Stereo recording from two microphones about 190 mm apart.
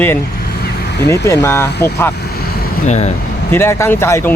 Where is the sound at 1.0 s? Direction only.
15° left (ahead or behind).